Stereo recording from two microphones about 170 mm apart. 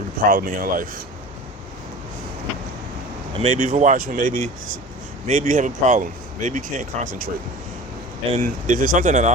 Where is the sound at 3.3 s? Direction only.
35° right (ahead or behind).